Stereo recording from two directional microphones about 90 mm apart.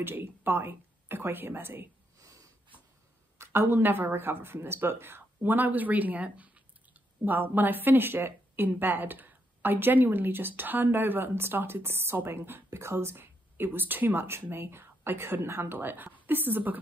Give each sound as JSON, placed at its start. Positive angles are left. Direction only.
{"t": 0.0, "sound": "speech", "side_deg": -25}
{"t": 2.1, "sound": "snort", "side_deg": -40}
{"t": 3.3, "sound": "speech", "side_deg": -25}